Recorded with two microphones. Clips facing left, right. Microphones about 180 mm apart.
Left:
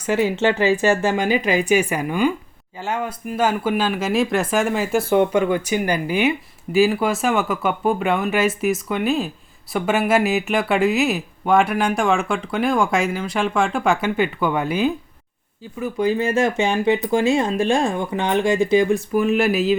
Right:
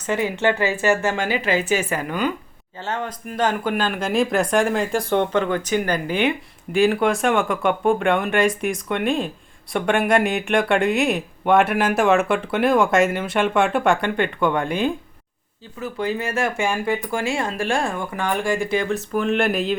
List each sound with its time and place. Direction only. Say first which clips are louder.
0.4 s speech: left 1 dB; 20° left (ahead or behind)